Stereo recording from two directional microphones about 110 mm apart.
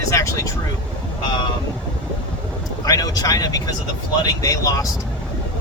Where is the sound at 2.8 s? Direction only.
35° left (ahead or behind).